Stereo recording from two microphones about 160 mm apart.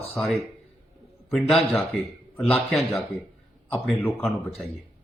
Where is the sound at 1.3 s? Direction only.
Centre (ahead or behind).